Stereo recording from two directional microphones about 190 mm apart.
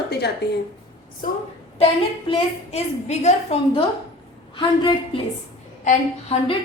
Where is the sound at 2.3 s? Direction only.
35° left (ahead or behind).